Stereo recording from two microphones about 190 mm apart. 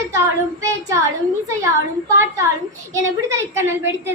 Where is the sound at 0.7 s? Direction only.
15° right (ahead or behind).